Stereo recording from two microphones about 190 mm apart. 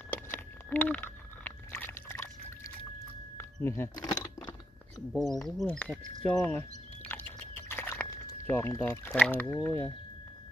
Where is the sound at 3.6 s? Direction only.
15° left (ahead or behind).